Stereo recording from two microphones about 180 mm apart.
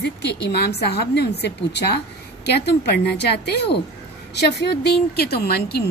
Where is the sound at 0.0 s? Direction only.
70° left (ahead or behind).